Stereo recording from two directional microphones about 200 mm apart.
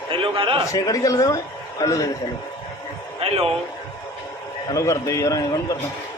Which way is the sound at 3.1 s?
30° right (ahead or behind).